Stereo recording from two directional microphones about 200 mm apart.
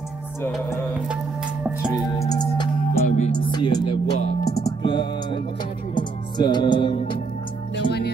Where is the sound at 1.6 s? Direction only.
5° right (ahead or behind).